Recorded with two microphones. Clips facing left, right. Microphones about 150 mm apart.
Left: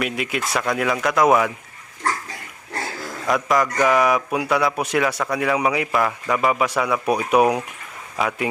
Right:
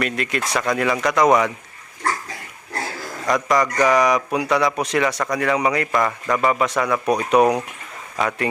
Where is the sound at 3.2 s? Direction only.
Centre (ahead or behind).